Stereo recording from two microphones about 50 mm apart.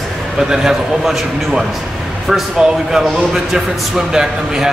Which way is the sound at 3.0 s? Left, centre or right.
Centre.